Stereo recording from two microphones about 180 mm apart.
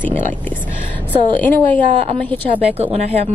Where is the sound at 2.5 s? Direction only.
35° right (ahead or behind).